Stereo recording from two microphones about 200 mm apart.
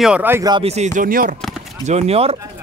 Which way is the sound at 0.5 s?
30° right (ahead or behind).